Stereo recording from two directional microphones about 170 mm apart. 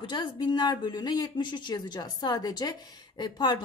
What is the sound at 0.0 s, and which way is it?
Speech, 30° left (ahead or behind).